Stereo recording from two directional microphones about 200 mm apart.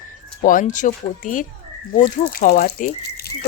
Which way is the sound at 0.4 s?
40° left (ahead or behind).